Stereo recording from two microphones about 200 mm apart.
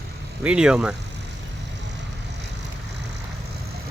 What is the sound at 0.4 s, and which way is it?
Speech, 5° right (ahead or behind).